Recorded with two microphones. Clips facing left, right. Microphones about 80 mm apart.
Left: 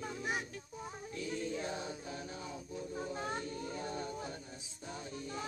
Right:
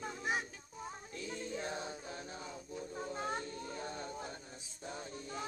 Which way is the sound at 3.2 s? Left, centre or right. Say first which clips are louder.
Even; right.